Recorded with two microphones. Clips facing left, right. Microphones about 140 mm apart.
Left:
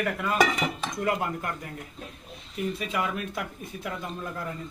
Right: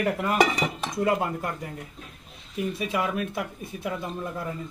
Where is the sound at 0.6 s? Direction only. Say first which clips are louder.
Right 1 dB; 10° right (ahead or behind).